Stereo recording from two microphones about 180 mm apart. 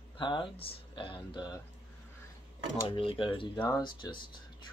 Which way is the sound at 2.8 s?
30° left (ahead or behind).